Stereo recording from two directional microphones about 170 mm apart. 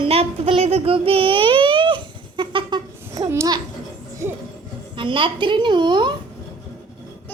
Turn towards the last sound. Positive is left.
turn(degrees=-25)  # may be behind; listen again after turning